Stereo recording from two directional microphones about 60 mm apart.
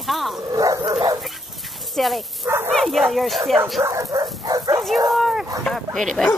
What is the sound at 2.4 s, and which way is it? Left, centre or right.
Speech, right.